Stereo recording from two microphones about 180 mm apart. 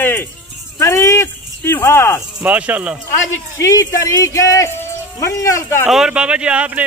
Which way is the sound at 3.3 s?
15° left (ahead or behind).